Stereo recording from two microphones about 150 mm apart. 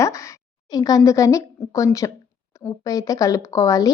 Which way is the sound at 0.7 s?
25° left (ahead or behind).